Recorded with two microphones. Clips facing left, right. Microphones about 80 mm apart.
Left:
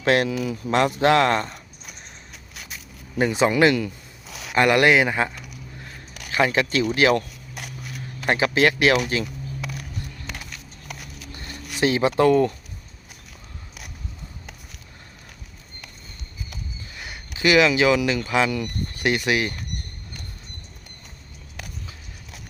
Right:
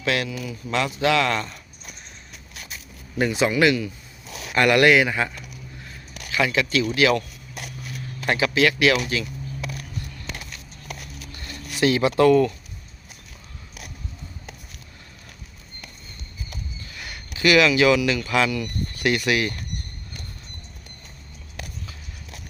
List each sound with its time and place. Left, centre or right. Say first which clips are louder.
0.0 s speech: left 5 dB; left
0.3 s speech: left 6 dB; left
0.7 s speech: left 3 dB; left
3.2 s speech: left 2 dB; left
4.5 s speech: even; left
8.3 s speech: left 1 dB; left
11.3 s a sound: left 2 dB; left
16.9 s speech: even; left